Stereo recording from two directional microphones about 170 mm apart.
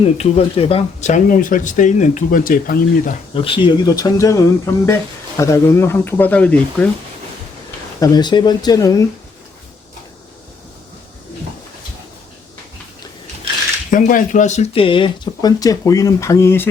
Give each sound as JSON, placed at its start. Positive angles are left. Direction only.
{"t": 0.2, "sound": "speech", "side_deg": 35}
{"t": 3.3, "sound": "speech", "side_deg": 30}
{"t": 7.9, "sound": "speech", "side_deg": 20}
{"t": 13.9, "sound": "speech", "side_deg": 50}